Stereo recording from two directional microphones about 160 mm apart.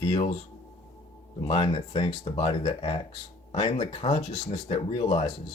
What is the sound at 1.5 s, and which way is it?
Speech, 40° left (ahead or behind).